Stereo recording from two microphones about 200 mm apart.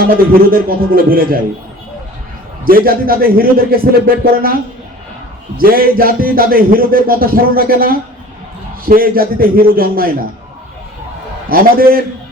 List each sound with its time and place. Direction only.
0.0 s speech: 45° right (ahead or behind)
2.6 s speech: 45° right (ahead or behind)
5.5 s speech: 45° right (ahead or behind)
11.4 s speech: 45° right (ahead or behind)